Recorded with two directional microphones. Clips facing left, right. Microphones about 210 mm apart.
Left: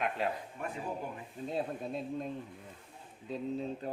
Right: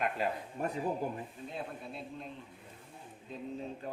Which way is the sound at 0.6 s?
35° right (ahead or behind).